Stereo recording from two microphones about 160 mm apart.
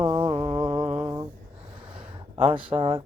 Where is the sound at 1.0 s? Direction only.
20° right (ahead or behind).